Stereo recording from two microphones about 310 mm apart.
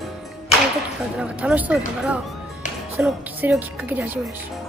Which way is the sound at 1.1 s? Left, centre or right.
Centre.